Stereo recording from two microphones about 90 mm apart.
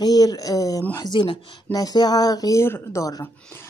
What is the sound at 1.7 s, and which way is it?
Speech, 45° left (ahead or behind).